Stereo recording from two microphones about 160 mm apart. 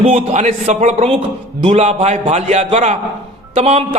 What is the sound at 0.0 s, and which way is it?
A man's voice, 45° right (ahead or behind).